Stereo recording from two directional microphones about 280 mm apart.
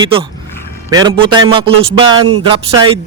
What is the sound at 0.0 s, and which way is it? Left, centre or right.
Speech, centre.